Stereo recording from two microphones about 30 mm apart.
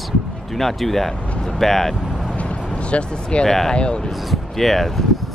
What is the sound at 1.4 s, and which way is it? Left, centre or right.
Vehicle, centre.